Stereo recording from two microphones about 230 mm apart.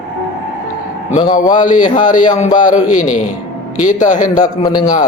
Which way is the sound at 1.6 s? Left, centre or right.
Left.